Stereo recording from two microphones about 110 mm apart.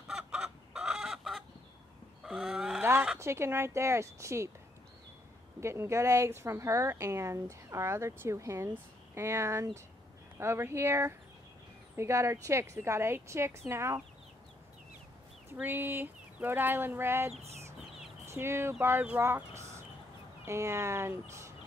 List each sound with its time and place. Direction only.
0.1 s chicken: 5° right (ahead or behind)
2.2 s a sound: centre (ahead or behind)
2.8 s a sound: 20° right (ahead or behind)
3.2 s speech: 25° right (ahead or behind)
5.6 s speech: 25° right (ahead or behind)
15.5 s speech: 15° right (ahead or behind)
17.3 s speech: 70° right (ahead or behind)
18.2 s speech: 25° right (ahead or behind)